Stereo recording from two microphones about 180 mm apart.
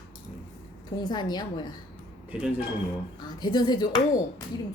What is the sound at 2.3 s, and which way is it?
Speech, 5° right (ahead or behind).